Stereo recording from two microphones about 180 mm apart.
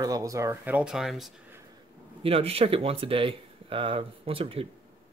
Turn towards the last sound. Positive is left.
turn(degrees=-30)  # may be behind; listen again after turning